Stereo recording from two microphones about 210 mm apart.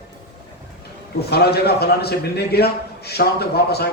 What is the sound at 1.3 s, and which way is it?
A man's voice, 50° left (ahead or behind).